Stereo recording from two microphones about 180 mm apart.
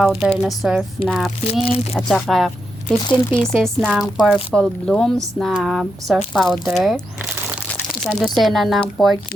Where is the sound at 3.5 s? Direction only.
Centre (ahead or behind).